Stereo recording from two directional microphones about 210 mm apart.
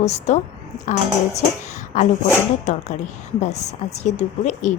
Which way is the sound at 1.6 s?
35° left (ahead or behind).